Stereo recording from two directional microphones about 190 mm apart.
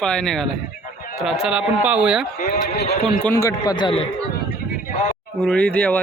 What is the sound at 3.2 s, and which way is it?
Speech, 15° left (ahead or behind).